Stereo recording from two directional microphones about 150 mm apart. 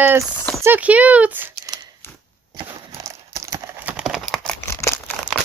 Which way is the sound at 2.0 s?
15° left (ahead or behind).